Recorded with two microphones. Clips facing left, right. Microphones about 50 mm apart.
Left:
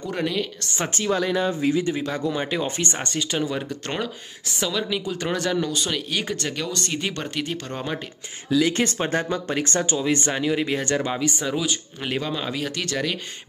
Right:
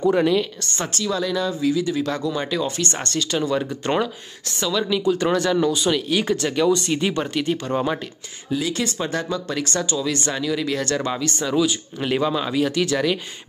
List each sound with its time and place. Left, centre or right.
0.1 s speech: centre
0.9 s speech: left
2.2 s speech: left
3.8 s speech: centre
8.6 s speech: left; by 11.6 s centre
12.2 s speech: centre